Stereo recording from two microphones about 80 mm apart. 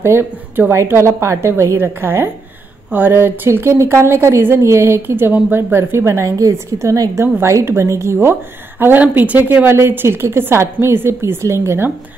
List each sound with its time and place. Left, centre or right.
0.0 s a woman's voice: right